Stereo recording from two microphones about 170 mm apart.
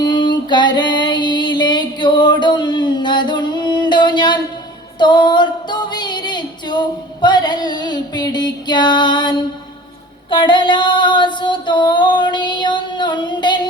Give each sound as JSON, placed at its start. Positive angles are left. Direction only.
{"t": 0.0, "sound": "music", "side_deg": 25}
{"t": 10.2, "sound": "female singing", "side_deg": 30}